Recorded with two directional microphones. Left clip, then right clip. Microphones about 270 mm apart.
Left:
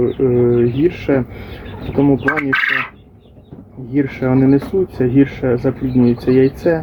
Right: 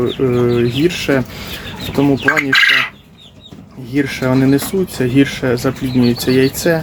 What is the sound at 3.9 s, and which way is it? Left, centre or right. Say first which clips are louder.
Speech: right 1 dB; centre.